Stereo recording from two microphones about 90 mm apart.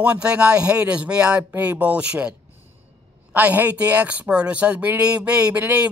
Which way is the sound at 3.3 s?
20° right (ahead or behind).